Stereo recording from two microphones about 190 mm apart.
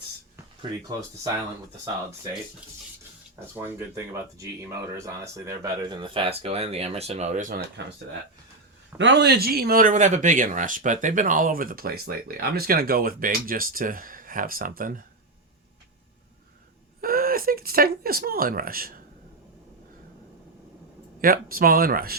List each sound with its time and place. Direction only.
0.6 s speech: 20° right (ahead or behind)
3.5 s speech: 10° right (ahead or behind); by 7.6 s 40° right (ahead or behind)
9.0 s speech: 70° right (ahead or behind); by 15.0 s 45° right (ahead or behind)
17.0 s a sound: 50° right (ahead or behind)
21.2 s speech: 50° right (ahead or behind)